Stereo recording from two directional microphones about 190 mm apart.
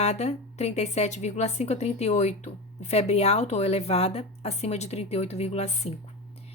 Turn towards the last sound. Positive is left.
turn(degrees=35)  # may be behind; listen again after turning